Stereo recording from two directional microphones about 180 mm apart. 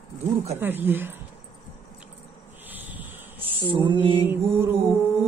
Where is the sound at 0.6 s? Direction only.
10° right (ahead or behind).